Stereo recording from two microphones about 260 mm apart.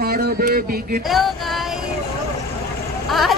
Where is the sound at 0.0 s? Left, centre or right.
Right.